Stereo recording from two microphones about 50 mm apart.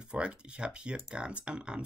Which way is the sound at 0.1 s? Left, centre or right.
Right.